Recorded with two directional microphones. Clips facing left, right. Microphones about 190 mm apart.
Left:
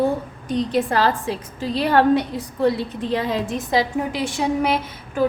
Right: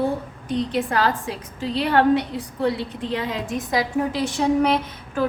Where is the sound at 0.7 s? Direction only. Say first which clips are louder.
Left 4 dB; 30° left (ahead or behind).